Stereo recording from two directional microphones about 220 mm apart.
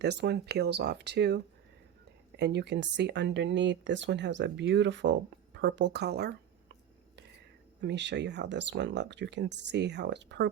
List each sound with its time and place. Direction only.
0.0 s speech: 50° right (ahead or behind)
7.8 s speech: 50° right (ahead or behind)